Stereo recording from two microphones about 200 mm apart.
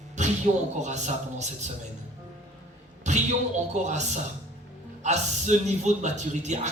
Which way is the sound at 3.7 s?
35° right (ahead or behind).